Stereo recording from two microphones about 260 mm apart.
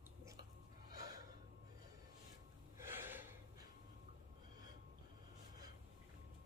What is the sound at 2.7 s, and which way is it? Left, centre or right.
Gasp, centre.